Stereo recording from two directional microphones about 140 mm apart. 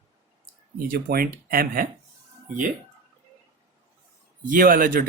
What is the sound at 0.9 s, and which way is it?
Speech, 90° right.